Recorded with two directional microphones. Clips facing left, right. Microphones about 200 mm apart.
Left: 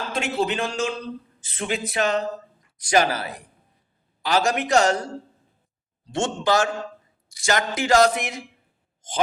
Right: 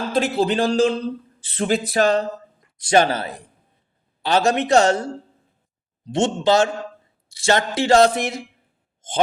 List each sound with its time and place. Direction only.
0.1 s a man's voice: 35° right (ahead or behind)
6.1 s speech: 20° right (ahead or behind)
9.0 s a sound: 25° right (ahead or behind)